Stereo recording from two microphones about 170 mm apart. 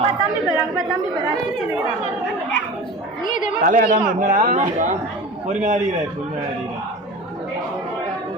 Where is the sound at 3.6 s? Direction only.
55° right (ahead or behind).